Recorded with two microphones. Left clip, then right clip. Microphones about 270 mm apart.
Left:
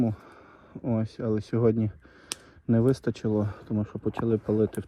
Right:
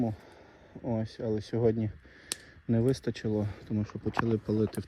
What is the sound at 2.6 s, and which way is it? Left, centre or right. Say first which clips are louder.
Speech: left 4 dB; left.